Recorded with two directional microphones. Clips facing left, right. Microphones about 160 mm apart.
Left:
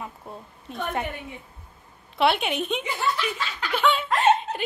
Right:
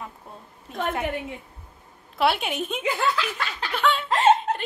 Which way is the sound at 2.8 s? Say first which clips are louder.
Right 2 dB; 90° right.